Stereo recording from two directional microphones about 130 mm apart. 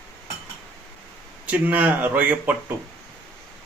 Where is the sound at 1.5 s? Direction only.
15° right (ahead or behind).